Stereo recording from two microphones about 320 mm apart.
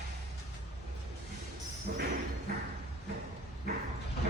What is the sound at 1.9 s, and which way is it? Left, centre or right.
Music, right.